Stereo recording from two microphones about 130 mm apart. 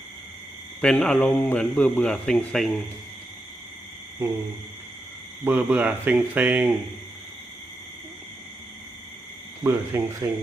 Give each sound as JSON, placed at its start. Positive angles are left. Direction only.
{"t": 0.8, "sound": "speech", "side_deg": 5}
{"t": 5.5, "sound": "speech", "side_deg": -10}
{"t": 9.6, "sound": "speech", "side_deg": -20}